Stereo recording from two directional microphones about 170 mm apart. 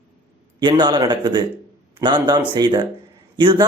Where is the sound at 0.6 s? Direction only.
25° right (ahead or behind).